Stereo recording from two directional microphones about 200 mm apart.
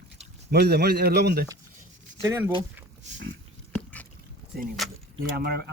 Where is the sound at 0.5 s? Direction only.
55° right (ahead or behind).